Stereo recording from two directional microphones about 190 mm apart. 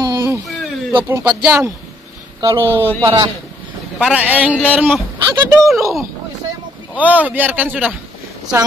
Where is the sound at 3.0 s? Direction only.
15° right (ahead or behind).